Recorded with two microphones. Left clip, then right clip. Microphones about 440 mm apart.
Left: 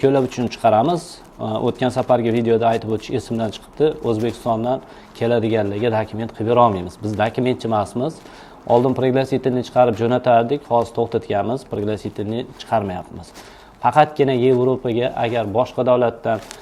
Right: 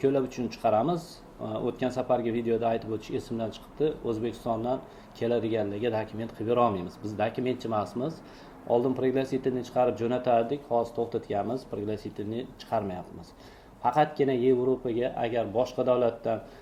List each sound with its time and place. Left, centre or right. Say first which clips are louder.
0.0 s speech: left 10 dB; left